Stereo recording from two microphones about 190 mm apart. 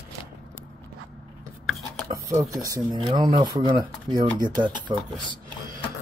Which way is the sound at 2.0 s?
15° right (ahead or behind).